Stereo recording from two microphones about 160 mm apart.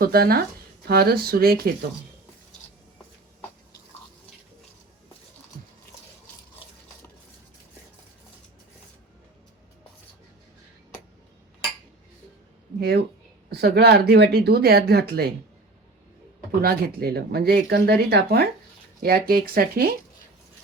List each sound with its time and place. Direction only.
0.0 s speech: 70° right (ahead or behind)
13.5 s speech: 90° right
16.6 s speech: 70° right (ahead or behind)